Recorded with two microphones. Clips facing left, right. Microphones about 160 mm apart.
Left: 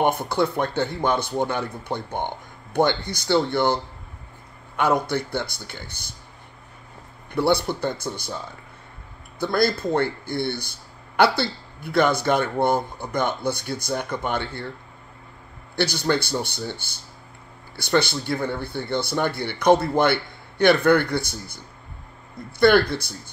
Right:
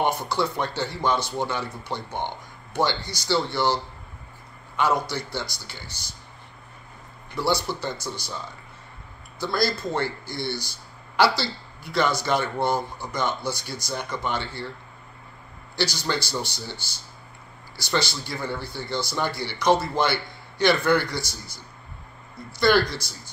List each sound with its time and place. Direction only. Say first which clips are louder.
0.0 s speech: left 3 dB; 55° left (ahead or behind)
7.3 s speech: left 4 dB; 55° left (ahead or behind)
9.4 s speech: left 4 dB; 55° left (ahead or behind)
15.7 s speech: left 4 dB; 55° left (ahead or behind)
22.6 s speech: left 4 dB; 55° left (ahead or behind)